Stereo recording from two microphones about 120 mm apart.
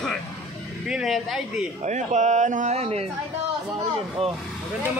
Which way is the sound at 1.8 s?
80° right.